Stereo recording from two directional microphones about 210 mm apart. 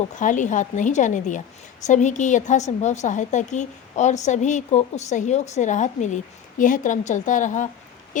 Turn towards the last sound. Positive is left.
turn(degrees=35)  # may be behind; listen again after turning